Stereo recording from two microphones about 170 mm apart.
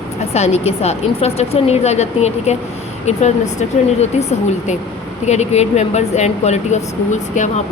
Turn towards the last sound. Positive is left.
turn(degrees=45)  # may be behind; listen again after turning